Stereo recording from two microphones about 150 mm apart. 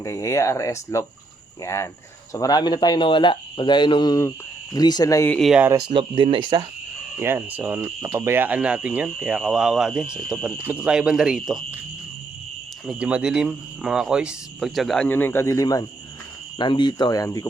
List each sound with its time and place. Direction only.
0.0 s speech: 20° left (ahead or behind)
5.3 s speech: centre (ahead or behind)
5.9 s speech: 35° right (ahead or behind)
7.2 s speech: 15° right (ahead or behind)
12.8 s speech: 5° right (ahead or behind); by 17.4 s 25° left (ahead or behind)